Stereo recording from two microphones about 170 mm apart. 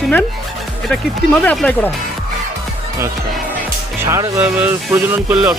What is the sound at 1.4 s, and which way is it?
Speech, 5° left (ahead or behind).